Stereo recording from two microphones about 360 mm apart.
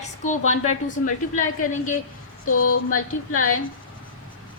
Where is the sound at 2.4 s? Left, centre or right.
Left.